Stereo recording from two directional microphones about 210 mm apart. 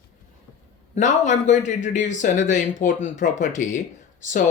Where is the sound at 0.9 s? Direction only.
35° left (ahead or behind).